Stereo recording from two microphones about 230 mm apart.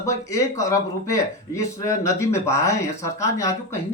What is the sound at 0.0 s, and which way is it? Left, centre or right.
A man's voice, centre.